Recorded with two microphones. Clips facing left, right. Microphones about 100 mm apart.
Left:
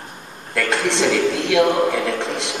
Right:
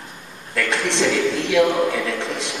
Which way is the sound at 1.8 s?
35° left (ahead or behind).